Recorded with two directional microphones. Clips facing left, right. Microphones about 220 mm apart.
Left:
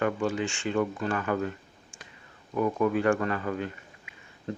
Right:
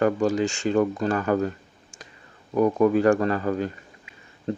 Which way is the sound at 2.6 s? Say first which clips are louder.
Right 6 dB; 40° right (ahead or behind).